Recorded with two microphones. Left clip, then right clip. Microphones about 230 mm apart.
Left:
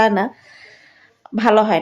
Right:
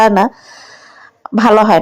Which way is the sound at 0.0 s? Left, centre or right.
Right.